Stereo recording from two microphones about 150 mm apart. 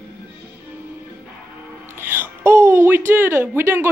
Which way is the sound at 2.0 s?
15° right (ahead or behind).